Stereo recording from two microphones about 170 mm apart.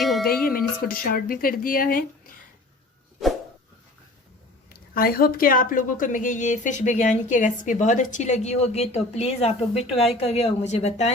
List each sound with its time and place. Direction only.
0.0 s music: centre (ahead or behind)
0.4 s music: 60° left (ahead or behind)
1.1 s a woman's voice: 55° left (ahead or behind)
4.7 s a woman's voice: 60° left (ahead or behind); by 11.1 s 40° left (ahead or behind)